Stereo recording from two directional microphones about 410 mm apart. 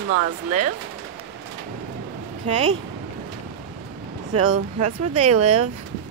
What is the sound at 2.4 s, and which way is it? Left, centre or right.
Speech, right.